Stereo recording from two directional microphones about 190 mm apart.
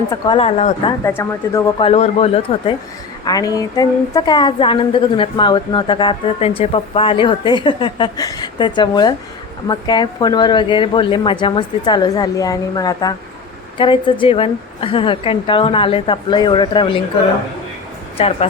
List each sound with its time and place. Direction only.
0.1 s a woman's voice: 25° left (ahead or behind)
1.0 s speech: 15° left (ahead or behind)
1.8 s a man's voice: 30° left (ahead or behind)
3.2 s a woman's voice: 20° left (ahead or behind)
18.2 s a man's voice: 30° left (ahead or behind)